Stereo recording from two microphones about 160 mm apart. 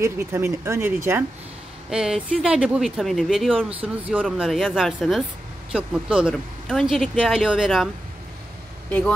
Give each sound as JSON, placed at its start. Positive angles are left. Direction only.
{"t": 0.0, "sound": "speech", "side_deg": -15}